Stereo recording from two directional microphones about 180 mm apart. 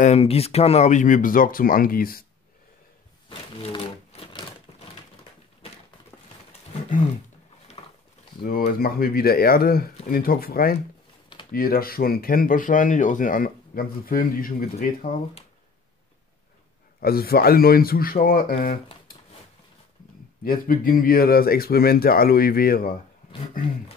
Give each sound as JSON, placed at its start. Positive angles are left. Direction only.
{"t": 0.0, "sound": "speech", "side_deg": 35}
{"t": 3.3, "sound": "crumpling", "side_deg": 30}
{"t": 7.8, "sound": "a sound", "side_deg": 30}
{"t": 8.5, "sound": "speech", "side_deg": 55}
{"t": 17.0, "sound": "speech", "side_deg": 55}
{"t": 20.4, "sound": "speech", "side_deg": 50}